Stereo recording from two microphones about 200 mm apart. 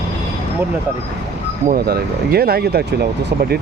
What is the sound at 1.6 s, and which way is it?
Speech, 50° right (ahead or behind).